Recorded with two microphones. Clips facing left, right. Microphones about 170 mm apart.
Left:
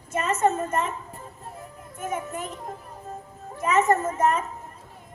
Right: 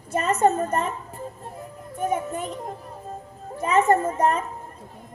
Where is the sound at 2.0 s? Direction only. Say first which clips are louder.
Right 5 dB; 30° right (ahead or behind).